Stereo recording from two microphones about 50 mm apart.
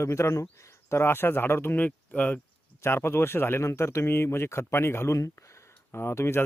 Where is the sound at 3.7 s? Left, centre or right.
Left.